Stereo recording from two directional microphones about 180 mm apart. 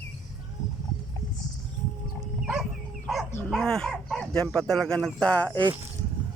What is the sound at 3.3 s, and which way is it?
Dog, 15° left (ahead or behind).